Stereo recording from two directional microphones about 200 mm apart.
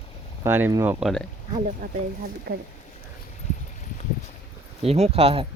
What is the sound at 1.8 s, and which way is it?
Speech, 45° right (ahead or behind).